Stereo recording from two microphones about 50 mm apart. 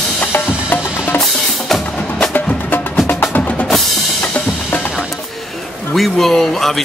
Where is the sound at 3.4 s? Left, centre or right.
Left.